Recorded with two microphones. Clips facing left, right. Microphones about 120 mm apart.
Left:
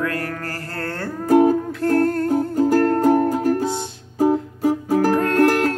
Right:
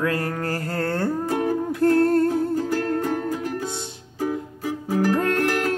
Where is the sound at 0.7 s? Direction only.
20° right (ahead or behind).